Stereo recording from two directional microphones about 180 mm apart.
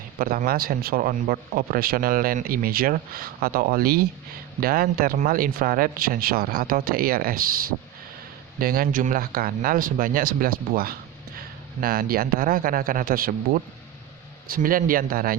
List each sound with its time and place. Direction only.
0.2 s speech: 55° right (ahead or behind)